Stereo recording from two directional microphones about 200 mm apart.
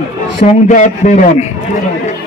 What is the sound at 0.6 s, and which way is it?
Speech, 40° left (ahead or behind).